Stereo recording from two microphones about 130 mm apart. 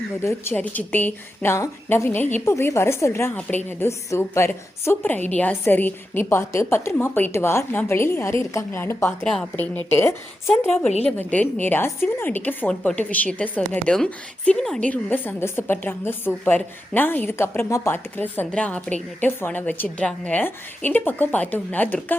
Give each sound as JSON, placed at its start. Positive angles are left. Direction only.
{"t": 0.2, "sound": "a woman's voice", "side_deg": 20}
{"t": 9.2, "sound": "a woman's voice", "side_deg": 5}